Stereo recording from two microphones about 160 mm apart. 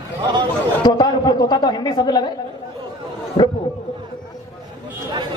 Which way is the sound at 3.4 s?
30° left (ahead or behind).